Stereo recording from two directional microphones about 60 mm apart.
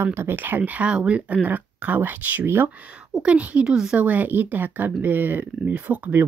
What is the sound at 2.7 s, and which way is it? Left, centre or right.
Speech, right.